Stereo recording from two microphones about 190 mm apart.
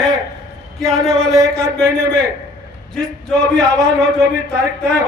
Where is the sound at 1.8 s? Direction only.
20° right (ahead or behind).